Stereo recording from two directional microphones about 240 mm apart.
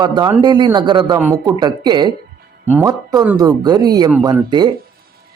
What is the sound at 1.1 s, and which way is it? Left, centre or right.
Speech, centre.